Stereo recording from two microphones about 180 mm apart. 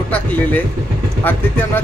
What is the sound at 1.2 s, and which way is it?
Speech, 10° left (ahead or behind).